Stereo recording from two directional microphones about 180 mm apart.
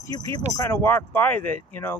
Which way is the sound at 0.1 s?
20° left (ahead or behind).